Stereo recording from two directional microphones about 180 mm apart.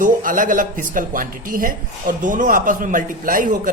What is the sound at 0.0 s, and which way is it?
A woman's voice, 45° right (ahead or behind).